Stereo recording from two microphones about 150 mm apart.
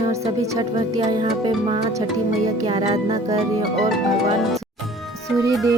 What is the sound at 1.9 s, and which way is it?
Speech, 25° right (ahead or behind).